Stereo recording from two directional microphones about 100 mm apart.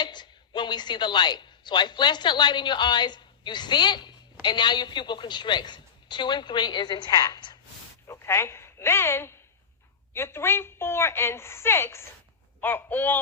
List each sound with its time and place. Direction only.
0.0 s a woman's voice: 50° left (ahead or behind)
8.0 s a woman's voice: 25° left (ahead or behind)